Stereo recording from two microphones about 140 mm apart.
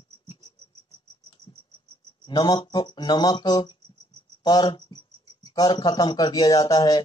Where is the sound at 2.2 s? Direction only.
30° left (ahead or behind).